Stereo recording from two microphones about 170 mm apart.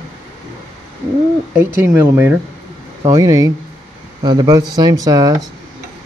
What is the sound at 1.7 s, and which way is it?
Speech, 15° right (ahead or behind).